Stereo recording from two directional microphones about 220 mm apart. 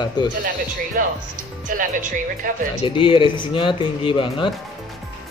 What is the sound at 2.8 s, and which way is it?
Speech, 25° left (ahead or behind).